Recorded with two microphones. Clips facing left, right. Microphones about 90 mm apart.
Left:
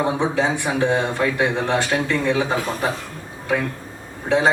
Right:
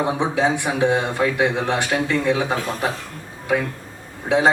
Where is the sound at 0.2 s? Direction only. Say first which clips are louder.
Right 1 dB; 15° right (ahead or behind).